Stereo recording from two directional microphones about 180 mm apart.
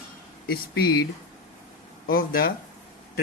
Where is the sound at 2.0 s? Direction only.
55° left (ahead or behind).